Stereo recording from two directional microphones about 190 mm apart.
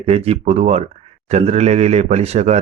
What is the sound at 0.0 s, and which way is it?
Speech, 30° right (ahead or behind).